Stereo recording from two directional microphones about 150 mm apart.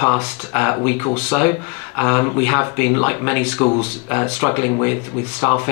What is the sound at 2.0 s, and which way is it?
Speech, 25° left (ahead or behind).